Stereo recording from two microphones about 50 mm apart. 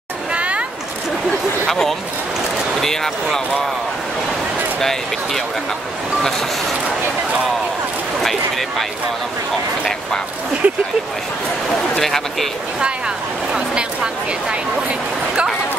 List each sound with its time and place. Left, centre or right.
0.3 s a sound: right
1.7 s speech: centre
4.7 s speech: centre
8.2 s speech: centre
10.6 s speech: right
12.0 s speech: centre